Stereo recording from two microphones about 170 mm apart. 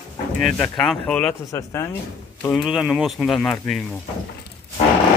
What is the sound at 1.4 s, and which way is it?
Speech, 15° left (ahead or behind).